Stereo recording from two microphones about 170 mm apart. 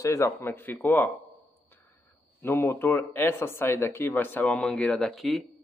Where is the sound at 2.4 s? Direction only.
15° left (ahead or behind).